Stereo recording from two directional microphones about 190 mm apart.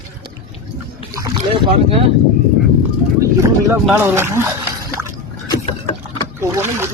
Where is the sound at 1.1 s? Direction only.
25° right (ahead or behind).